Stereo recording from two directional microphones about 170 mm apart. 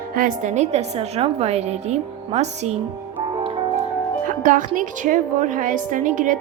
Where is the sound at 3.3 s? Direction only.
30° right (ahead or behind).